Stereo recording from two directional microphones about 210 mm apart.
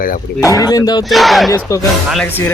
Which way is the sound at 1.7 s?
15° left (ahead or behind).